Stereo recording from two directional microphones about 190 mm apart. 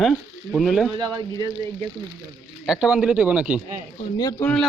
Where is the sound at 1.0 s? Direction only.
20° right (ahead or behind).